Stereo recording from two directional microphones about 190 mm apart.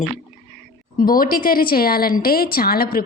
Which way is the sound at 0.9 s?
50° left (ahead or behind).